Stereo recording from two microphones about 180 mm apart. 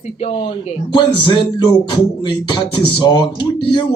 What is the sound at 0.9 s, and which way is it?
Speech, 25° left (ahead or behind).